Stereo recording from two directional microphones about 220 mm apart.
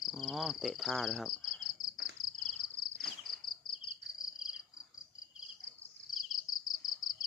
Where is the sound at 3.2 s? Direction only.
Centre (ahead or behind).